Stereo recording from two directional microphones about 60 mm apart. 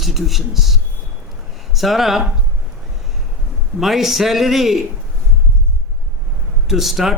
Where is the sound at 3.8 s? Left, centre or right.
Centre.